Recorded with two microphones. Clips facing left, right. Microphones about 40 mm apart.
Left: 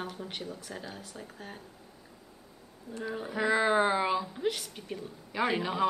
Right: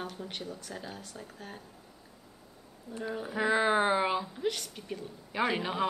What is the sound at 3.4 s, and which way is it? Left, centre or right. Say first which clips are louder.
Speech: left 1 dB; centre.